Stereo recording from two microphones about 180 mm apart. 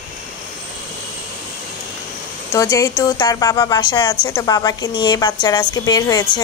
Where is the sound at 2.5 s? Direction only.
20° left (ahead or behind).